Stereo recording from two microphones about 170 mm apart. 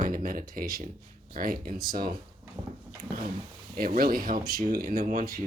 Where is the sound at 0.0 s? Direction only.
55° right (ahead or behind).